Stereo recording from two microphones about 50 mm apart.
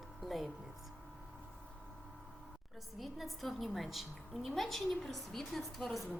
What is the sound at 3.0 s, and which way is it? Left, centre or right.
A woman's voice, centre.